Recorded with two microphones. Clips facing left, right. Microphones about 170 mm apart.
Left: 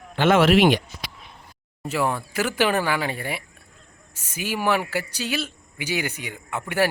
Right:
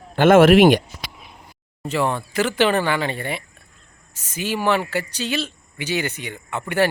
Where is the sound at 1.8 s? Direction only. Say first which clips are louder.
Right 2 dB; 5° left (ahead or behind).